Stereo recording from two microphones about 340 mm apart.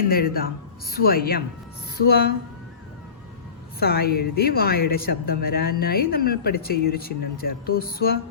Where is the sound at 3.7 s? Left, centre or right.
Left.